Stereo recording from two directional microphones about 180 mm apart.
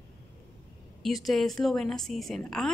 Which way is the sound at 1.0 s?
Centre (ahead or behind).